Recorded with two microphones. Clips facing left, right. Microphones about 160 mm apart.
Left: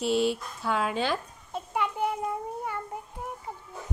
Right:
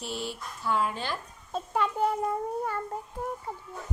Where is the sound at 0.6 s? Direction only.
90° left.